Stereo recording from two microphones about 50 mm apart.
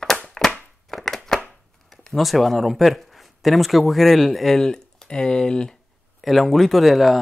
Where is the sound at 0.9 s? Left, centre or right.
Centre.